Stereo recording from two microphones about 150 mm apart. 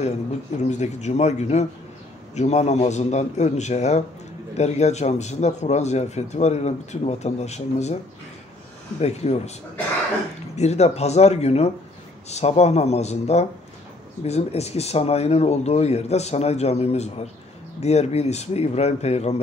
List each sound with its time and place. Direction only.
0.7 s speech: 50° left (ahead or behind)
9.0 s speech: 45° left (ahead or behind)
10.5 s speech: 45° left (ahead or behind)